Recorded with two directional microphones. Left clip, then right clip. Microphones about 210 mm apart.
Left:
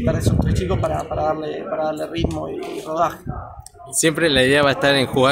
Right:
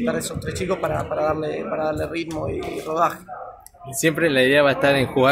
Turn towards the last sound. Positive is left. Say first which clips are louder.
# left 1 dB
turn(degrees=10)  # may be behind; listen again after turning